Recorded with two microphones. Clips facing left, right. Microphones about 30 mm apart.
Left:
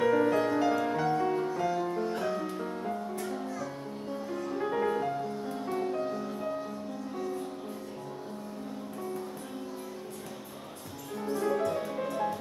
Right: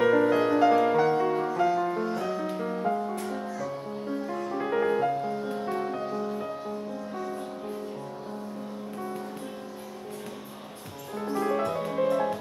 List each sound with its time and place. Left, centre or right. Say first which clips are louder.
0.0 s music: right 4 dB; right
3.4 s music: right 3 dB; centre
4.1 s music: right 3 dB; right
11.2 s music: right 2 dB; right